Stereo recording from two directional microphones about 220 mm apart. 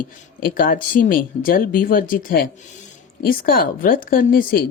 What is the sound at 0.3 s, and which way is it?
Speech, 40° left (ahead or behind).